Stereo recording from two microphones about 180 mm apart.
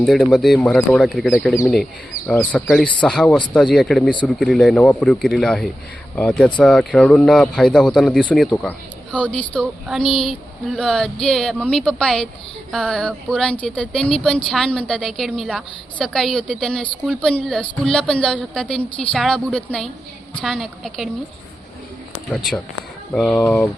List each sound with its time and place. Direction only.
0.0 s a woman's voice: centre (ahead or behind)
23.1 s speech: 5° left (ahead or behind)